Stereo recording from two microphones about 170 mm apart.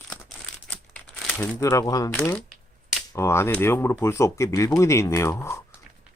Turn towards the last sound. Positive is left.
turn(degrees=15)  # may be behind; listen again after turning